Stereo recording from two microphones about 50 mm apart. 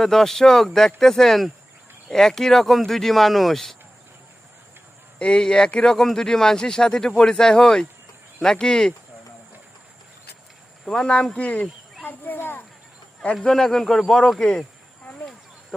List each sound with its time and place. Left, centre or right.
0.0 s speech: centre
5.2 s speech: centre
10.8 s speech: centre
11.3 s speech: left
12.0 s speech: left
13.4 s speech: centre